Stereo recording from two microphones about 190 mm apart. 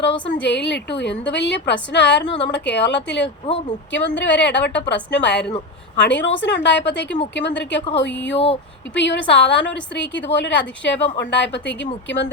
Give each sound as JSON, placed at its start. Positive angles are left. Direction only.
{"t": 0.1, "sound": "a woman's voice", "side_deg": 70}